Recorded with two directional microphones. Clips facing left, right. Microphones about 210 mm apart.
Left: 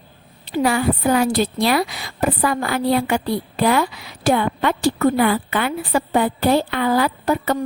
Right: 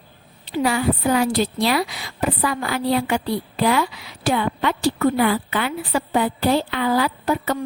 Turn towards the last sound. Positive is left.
turn(degrees=45)  # may be behind; listen again after turning